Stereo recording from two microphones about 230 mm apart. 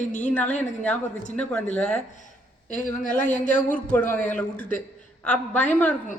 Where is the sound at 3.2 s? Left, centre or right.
Centre.